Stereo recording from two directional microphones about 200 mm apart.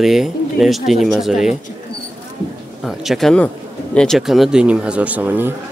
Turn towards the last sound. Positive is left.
turn(degrees=-10)  # may be behind; listen again after turning